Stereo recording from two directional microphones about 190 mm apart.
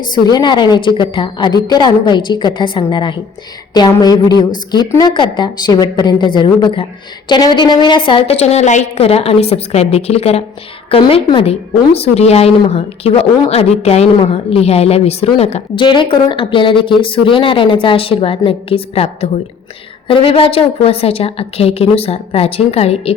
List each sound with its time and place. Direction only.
0.1 s a woman's voice: 20° left (ahead or behind)